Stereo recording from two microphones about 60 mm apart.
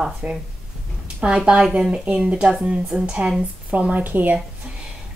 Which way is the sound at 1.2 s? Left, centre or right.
Centre.